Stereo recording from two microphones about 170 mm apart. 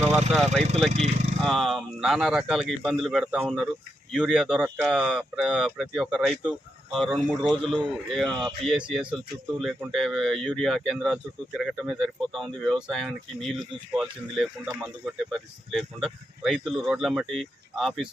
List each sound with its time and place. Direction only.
0.1 s speech: centre (ahead or behind)
0.9 s speech: 40° right (ahead or behind)
1.5 s speech: centre (ahead or behind)